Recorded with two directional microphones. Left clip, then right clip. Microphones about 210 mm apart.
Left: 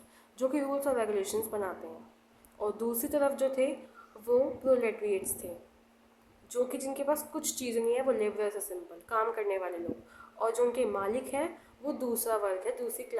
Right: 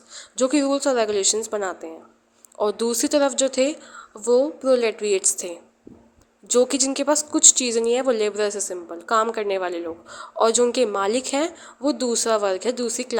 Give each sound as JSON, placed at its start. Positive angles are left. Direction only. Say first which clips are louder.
{"t": 0.1, "sound": "speech", "louder": "right 11 dB", "side_deg": -35}
{"t": 6.5, "sound": "speech", "louder": "right 13 dB", "side_deg": -40}